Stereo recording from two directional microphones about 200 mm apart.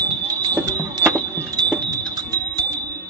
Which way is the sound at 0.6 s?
15° right (ahead or behind).